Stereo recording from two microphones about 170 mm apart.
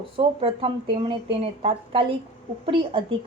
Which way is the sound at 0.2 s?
35° right (ahead or behind).